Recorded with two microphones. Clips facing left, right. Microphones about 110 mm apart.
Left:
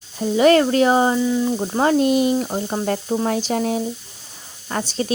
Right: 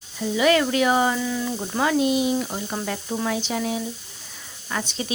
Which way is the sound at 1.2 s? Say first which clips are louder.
Left 7 dB; 20° left (ahead or behind).